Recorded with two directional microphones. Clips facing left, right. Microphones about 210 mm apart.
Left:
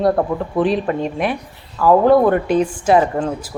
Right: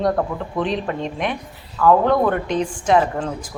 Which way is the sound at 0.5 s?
5° left (ahead or behind).